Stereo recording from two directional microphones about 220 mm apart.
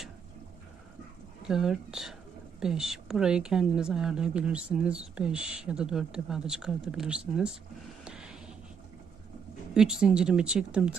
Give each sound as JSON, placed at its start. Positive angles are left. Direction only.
{"t": 1.4, "sound": "a woman's voice", "side_deg": 0}
{"t": 8.0, "sound": "a sound", "side_deg": -5}
{"t": 9.7, "sound": "a woman's voice", "side_deg": -5}